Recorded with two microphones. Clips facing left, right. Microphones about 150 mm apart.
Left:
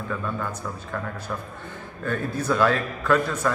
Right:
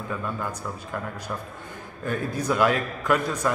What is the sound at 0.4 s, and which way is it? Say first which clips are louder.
Speech: left 1 dB; 15° right (ahead or behind).